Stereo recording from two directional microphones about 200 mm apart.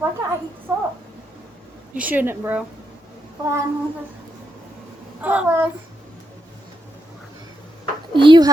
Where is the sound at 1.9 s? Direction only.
10° right (ahead or behind).